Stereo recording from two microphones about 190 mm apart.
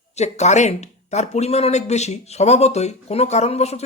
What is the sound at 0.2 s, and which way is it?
Speech, 35° left (ahead or behind).